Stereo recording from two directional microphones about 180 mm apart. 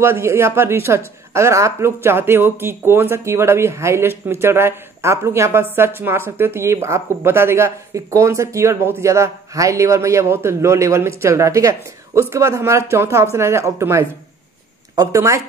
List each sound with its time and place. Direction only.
0.0 s speech: 15° right (ahead or behind)